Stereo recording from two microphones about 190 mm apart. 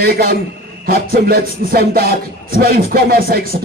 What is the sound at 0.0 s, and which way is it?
Music, 55° right (ahead or behind).